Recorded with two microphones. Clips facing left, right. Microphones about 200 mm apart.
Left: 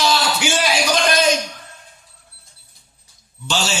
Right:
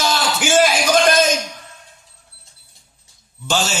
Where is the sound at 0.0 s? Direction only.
50° right (ahead or behind).